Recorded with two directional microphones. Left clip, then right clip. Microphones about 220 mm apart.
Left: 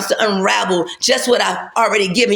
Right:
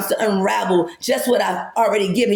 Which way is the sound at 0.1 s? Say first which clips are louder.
Left 3 dB; 10° left (ahead or behind).